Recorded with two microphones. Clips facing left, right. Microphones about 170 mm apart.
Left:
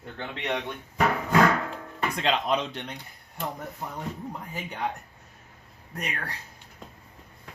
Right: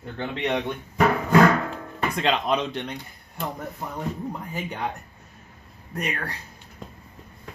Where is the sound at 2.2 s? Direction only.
65° right (ahead or behind).